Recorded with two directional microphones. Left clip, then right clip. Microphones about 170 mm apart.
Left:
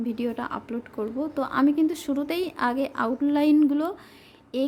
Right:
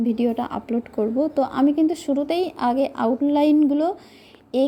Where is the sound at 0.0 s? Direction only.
10° right (ahead or behind).